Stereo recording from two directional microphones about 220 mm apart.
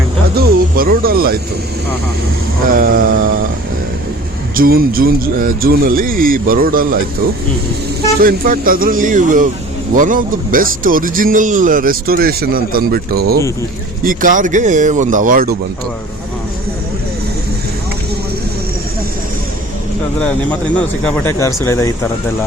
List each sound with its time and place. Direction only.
0.3 s music: 40° right (ahead or behind)
2.6 s a man's voice: 40° right (ahead or behind)
4.5 s a man's voice: 40° right (ahead or behind)
8.2 s a man's voice: 40° right (ahead or behind)
21.0 s speech: 10° left (ahead or behind)